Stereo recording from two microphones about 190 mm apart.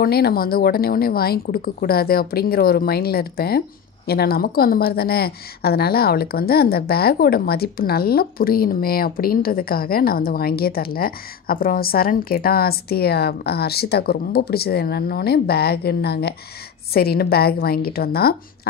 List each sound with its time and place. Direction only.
0.0 s a woman's voice: 55° left (ahead or behind)